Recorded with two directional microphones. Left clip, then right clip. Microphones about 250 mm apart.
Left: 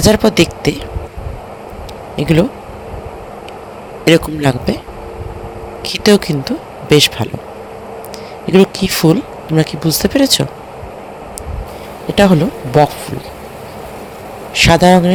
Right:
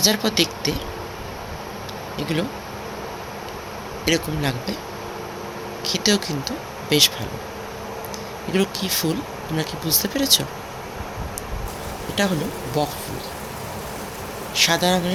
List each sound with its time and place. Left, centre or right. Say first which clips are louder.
0.0 s speech: left 9 dB; left
2.1 s speech: left 12 dB; left
4.0 s speech: left 11 dB; left
5.9 s speech: left 10 dB; left
8.5 s speech: left 11 dB; left
12.1 s speech: left 12 dB; left
14.5 s speech: left 10 dB; left